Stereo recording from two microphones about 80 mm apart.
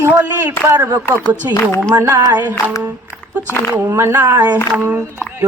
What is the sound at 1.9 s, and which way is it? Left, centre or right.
Speech, right.